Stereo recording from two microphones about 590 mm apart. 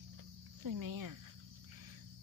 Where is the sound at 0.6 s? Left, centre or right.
Right.